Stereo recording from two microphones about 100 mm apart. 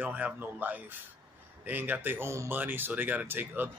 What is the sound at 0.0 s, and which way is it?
A man's voice, 15° right (ahead or behind).